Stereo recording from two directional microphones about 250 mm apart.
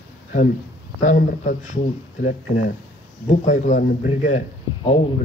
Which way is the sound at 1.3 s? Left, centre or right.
Left.